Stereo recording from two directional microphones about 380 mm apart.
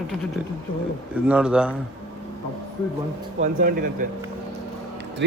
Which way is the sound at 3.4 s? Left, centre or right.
Right.